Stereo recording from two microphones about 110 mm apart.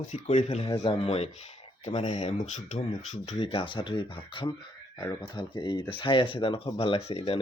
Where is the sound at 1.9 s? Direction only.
45° left (ahead or behind).